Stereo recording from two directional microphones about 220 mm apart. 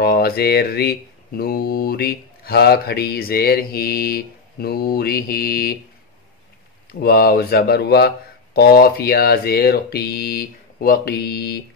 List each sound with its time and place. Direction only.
0.0 s speech: 45° left (ahead or behind)
6.9 s speech: 45° left (ahead or behind)